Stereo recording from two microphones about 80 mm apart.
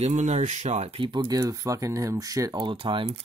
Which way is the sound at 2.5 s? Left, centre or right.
Right.